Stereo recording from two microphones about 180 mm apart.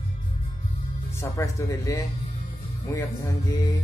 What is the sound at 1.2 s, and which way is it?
Speech, 15° left (ahead or behind).